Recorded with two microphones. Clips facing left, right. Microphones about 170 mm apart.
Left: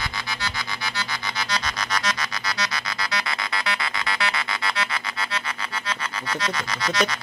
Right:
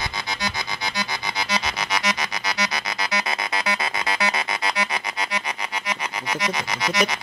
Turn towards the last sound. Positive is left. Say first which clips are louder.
# right 1 dB
turn(degrees=-15)  # may be behind; listen again after turning